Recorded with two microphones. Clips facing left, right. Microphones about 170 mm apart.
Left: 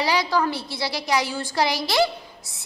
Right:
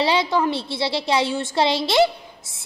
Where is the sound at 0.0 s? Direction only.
25° right (ahead or behind).